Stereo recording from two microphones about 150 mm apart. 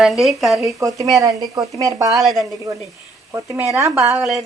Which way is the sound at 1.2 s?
20° right (ahead or behind).